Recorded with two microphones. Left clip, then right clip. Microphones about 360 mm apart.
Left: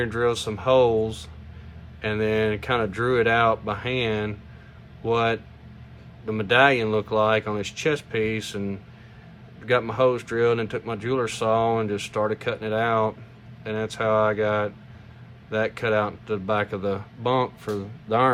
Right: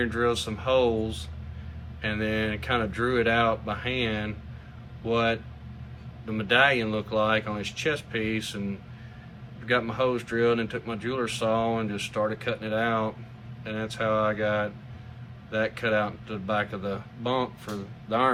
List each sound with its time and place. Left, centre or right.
0.0 s speech: centre
9.6 s speech: centre